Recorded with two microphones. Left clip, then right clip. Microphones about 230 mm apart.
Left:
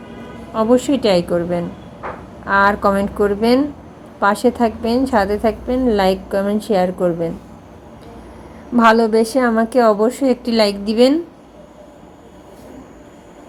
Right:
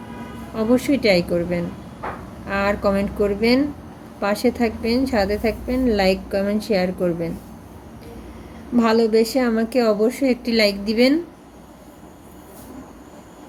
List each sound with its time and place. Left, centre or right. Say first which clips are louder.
0.5 s a woman's voice: left 5 dB; centre
5.2 s a woman's voice: left 4 dB; left
5.6 s a woman's voice: left 2 dB; centre
8.7 s a woman's voice: left 5 dB; centre